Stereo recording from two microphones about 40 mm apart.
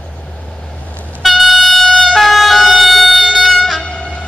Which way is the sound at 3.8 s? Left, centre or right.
Left.